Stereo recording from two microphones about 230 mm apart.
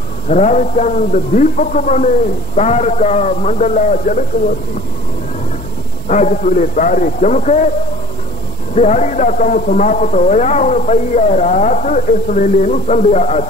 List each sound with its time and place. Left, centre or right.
0.3 s a man's voice: left
6.0 s a man's voice: left
8.7 s a man's voice: left